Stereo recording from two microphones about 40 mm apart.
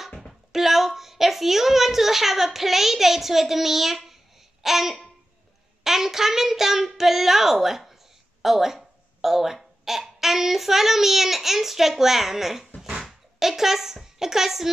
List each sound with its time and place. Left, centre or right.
0.3 s a woman's voice: centre
4.6 s babbling: centre
5.9 s a child's voice: centre